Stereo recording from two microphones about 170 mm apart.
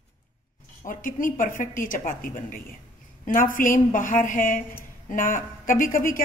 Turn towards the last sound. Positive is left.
turn(degrees=55)  # may be behind; listen again after turning